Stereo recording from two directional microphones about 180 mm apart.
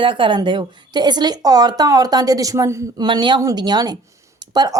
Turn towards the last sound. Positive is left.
turn(degrees=-20)  # may be behind; listen again after turning